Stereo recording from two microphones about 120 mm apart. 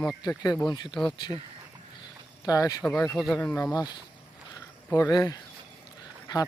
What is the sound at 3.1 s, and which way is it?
Speech, centre (ahead or behind).